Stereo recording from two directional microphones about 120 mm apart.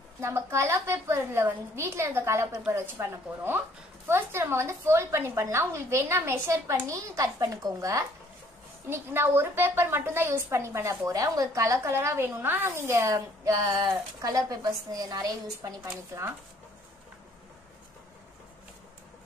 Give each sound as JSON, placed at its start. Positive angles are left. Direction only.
{"t": 0.2, "sound": "a woman's voice", "side_deg": -20}